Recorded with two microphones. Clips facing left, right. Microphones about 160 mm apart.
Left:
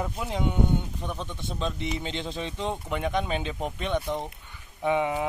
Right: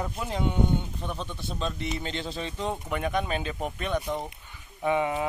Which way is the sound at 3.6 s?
10° right (ahead or behind).